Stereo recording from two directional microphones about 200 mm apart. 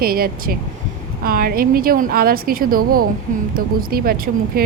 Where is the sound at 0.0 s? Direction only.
50° right (ahead or behind).